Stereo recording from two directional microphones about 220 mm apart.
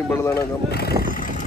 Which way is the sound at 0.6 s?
45° left (ahead or behind).